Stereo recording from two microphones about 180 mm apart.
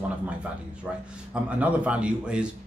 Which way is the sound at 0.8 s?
5° right (ahead or behind).